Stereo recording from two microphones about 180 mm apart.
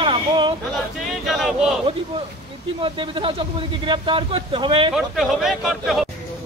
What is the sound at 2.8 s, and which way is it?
Speech, 30° right (ahead or behind).